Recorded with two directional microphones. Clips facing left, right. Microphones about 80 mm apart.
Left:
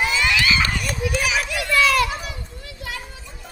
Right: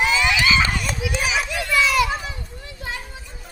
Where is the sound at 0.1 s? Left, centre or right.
Centre.